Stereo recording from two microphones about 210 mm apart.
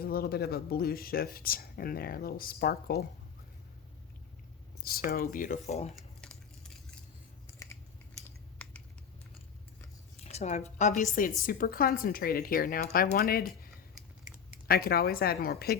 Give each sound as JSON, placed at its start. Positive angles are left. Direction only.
{"t": 0.0, "sound": "a woman's voice", "side_deg": 45}
{"t": 4.8, "sound": "speech", "side_deg": 45}
{"t": 6.0, "sound": "a sound", "side_deg": 0}
{"t": 8.6, "sound": "typing", "side_deg": 5}
{"t": 10.2, "sound": "a woman's voice", "side_deg": 30}
{"t": 14.7, "sound": "a woman's voice", "side_deg": 45}